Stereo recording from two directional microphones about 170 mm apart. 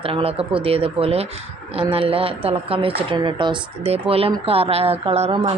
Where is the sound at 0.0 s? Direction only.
35° right (ahead or behind).